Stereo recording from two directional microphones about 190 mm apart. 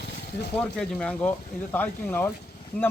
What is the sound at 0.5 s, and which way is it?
A man's voice, 5° left (ahead or behind).